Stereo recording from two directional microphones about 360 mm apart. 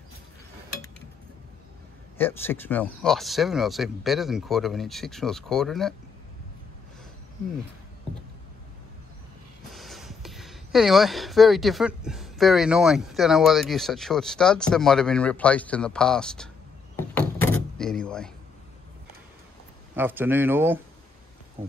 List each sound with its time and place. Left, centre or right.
2.1 s speech: centre
9.7 s speech: centre
16.9 s door: centre
20.0 s speech: centre